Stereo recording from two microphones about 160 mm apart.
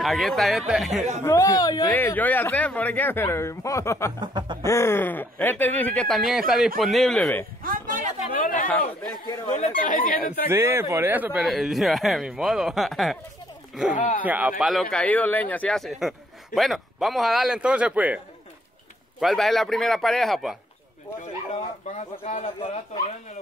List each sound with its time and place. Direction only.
0.0 s speech: centre (ahead or behind)
1.2 s speech: 20° left (ahead or behind)
1.9 s speech: 10° left (ahead or behind)
4.2 s speech: 30° right (ahead or behind)
4.6 s speech: 15° left (ahead or behind)
7.6 s a sound: 60° right (ahead or behind)
8.4 s speech: 60° left (ahead or behind)
8.6 s speech: 5° left (ahead or behind)
9.5 s speech: 55° left (ahead or behind)
10.5 s speech: 15° right (ahead or behind)
11.4 s speech: centre (ahead or behind)
13.9 s speech: 50° left (ahead or behind)
14.2 s speech: 10° right (ahead or behind)
21.9 s speech: 45° left (ahead or behind)